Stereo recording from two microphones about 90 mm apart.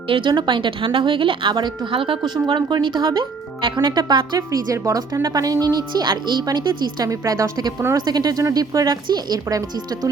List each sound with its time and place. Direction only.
0.1 s a woman's voice: 65° right (ahead or behind)
2.5 s speech: 55° right (ahead or behind)
4.4 s speech: 40° right (ahead or behind)
7.1 s a woman's voice: 35° right (ahead or behind)